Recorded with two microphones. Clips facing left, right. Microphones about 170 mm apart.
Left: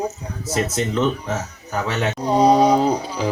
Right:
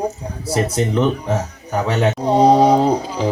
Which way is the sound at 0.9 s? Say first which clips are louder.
Right 3 dB; 15° right (ahead or behind).